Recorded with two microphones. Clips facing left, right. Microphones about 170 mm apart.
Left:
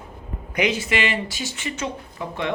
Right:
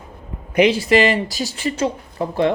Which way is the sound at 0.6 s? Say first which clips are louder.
Right 8 dB; 35° right (ahead or behind).